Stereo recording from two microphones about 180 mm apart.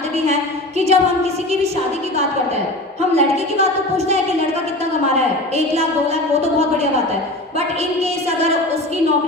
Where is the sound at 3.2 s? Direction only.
35° right (ahead or behind).